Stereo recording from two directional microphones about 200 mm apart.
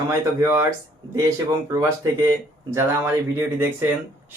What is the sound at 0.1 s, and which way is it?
Speech, 15° right (ahead or behind).